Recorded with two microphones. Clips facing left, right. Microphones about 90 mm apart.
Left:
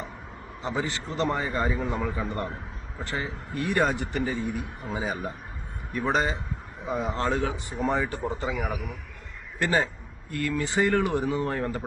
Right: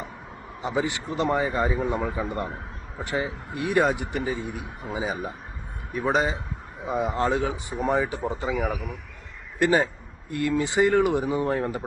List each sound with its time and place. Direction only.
0.6 s a man's voice: 15° right (ahead or behind)
8.4 s a man's voice: centre (ahead or behind)
9.6 s a man's voice: 10° right (ahead or behind)